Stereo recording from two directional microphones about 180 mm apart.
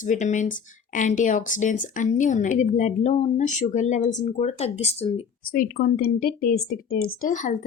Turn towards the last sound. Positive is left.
turn(degrees=45)  # may be behind; listen again after turning